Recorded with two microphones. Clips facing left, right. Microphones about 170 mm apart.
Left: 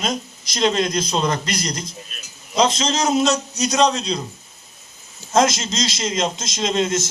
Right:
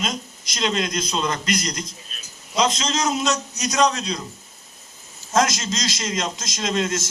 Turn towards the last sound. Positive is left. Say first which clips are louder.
# left 3 dB
turn(degrees=25)  # may be behind; listen again after turning